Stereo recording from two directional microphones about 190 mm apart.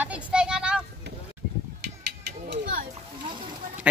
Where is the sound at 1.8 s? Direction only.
60° right (ahead or behind).